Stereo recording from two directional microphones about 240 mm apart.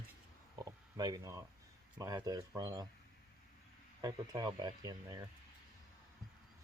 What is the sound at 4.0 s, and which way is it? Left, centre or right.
Speech, centre.